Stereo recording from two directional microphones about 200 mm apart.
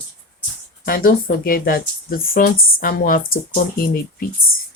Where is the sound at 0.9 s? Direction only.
45° left (ahead or behind).